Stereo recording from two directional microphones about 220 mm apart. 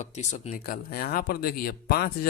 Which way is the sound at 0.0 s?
35° left (ahead or behind).